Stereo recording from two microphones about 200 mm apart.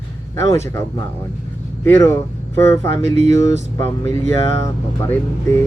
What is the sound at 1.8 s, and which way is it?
Speech, 15° left (ahead or behind).